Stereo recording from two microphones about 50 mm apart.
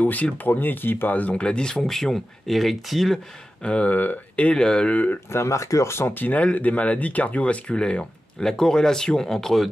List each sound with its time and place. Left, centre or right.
0.0 s speech: left
1.3 s speech: centre
3.6 s speech: left
3.9 s speech: left
4.6 s speech: centre
4.9 s speech: left
5.3 s speech: left
6.1 s speech: left; by 9.7 s centre